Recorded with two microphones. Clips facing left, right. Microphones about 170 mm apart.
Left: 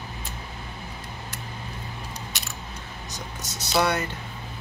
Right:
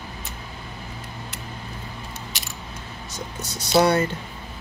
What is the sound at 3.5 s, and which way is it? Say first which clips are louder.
Speech: right 5 dB; 35° right (ahead or behind).